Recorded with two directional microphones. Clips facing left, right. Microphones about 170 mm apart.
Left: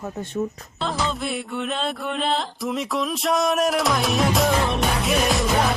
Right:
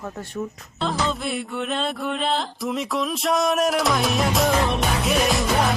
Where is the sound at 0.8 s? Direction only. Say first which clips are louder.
Right 1 dB; centre (ahead or behind).